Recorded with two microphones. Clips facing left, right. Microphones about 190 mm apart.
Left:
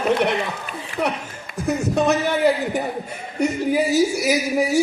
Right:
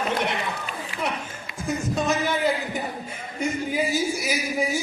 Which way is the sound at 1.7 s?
65° left (ahead or behind).